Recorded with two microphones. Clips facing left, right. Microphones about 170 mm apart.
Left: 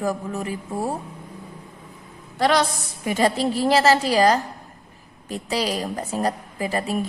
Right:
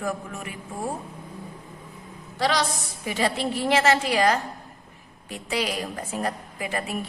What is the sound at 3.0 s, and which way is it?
A woman's voice, 45° left (ahead or behind).